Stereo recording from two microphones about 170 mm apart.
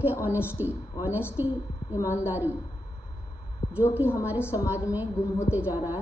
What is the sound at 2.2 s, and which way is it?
Speech, 10° right (ahead or behind).